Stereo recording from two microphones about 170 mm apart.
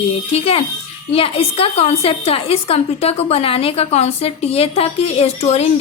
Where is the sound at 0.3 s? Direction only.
35° left (ahead or behind).